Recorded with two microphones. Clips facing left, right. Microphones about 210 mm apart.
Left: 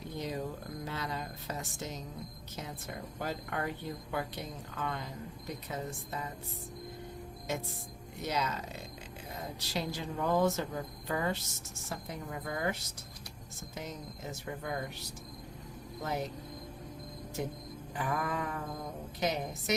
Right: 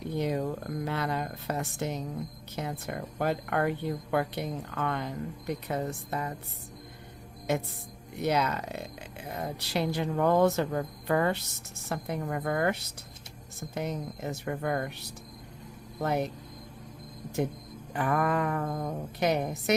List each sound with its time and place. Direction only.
0.2 s a sound: 65° right (ahead or behind)
0.9 s speech: 60° right (ahead or behind)
7.5 s speech: 65° right (ahead or behind)
16.0 s speech: 65° right (ahead or behind)
17.4 s speech: 65° right (ahead or behind)